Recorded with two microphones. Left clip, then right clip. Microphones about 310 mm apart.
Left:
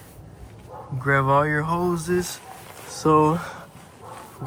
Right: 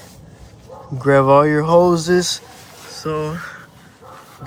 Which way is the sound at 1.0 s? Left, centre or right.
Centre.